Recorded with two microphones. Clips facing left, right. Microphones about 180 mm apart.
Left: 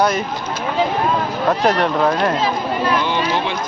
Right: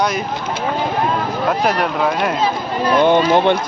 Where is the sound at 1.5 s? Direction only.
Centre (ahead or behind).